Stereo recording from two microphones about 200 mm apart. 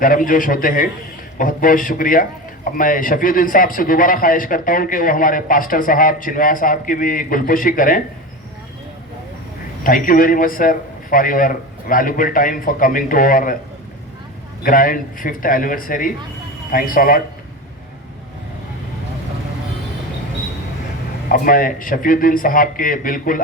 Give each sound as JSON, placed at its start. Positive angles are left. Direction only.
{"t": 0.0, "sound": "a man's voice", "side_deg": 45}
{"t": 9.8, "sound": "a man's voice", "side_deg": 45}
{"t": 14.6, "sound": "a man's voice", "side_deg": 45}
{"t": 21.2, "sound": "a man's voice", "side_deg": 45}